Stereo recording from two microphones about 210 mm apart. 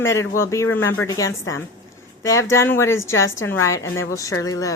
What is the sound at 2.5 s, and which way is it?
A woman's voice, 10° left (ahead or behind).